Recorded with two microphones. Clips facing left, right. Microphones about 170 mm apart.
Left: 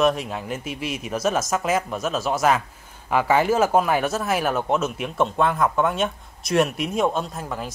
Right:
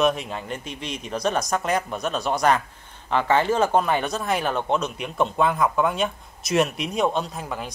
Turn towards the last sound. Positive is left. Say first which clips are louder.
# left 1 dB
turn(degrees=0)  # may be behind; listen again after turning